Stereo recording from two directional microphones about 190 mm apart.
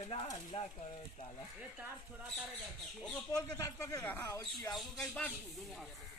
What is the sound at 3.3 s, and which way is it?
Speech, 20° left (ahead or behind).